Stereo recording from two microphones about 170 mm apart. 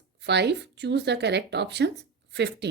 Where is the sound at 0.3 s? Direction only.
85° right.